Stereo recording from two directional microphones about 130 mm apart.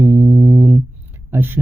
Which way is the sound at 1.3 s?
15° right (ahead or behind).